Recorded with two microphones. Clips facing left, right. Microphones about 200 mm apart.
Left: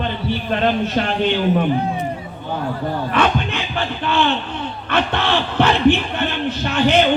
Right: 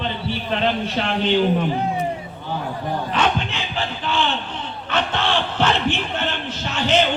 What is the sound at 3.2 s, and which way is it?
Crowd, 60° left (ahead or behind).